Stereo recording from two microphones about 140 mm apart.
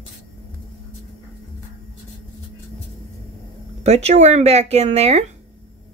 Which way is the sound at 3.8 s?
50° right (ahead or behind).